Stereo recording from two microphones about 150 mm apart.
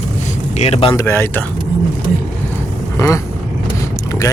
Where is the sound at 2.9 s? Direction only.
20° left (ahead or behind).